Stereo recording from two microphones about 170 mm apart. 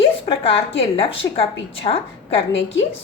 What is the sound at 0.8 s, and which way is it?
A woman's voice, 35° left (ahead or behind).